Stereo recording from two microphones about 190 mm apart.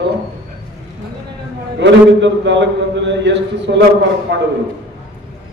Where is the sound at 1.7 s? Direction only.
70° right (ahead or behind).